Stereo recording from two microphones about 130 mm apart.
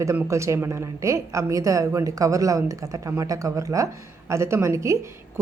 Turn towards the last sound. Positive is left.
turn(degrees=-20)  # may be behind; listen again after turning